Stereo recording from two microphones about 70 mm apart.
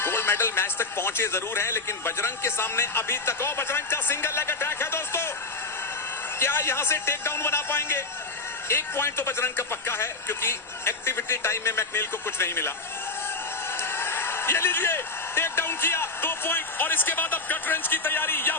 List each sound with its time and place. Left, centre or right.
0.0 s a man's voice: left
6.4 s a man's voice: left
13.7 s a man's voice: left